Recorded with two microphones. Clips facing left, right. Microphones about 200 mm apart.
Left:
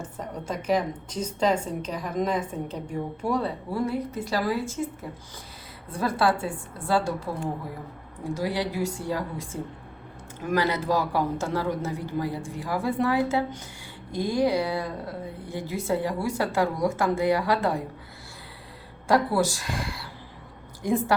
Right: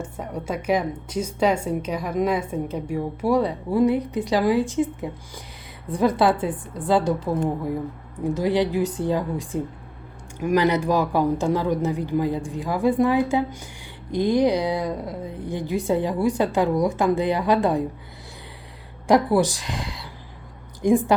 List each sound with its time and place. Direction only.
0.0 s a woman's voice: 10° right (ahead or behind)
8.2 s a woman's voice: 20° right (ahead or behind)
19.0 s a woman's voice: 20° right (ahead or behind)